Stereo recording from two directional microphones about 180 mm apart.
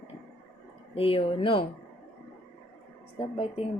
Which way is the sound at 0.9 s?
30° left (ahead or behind).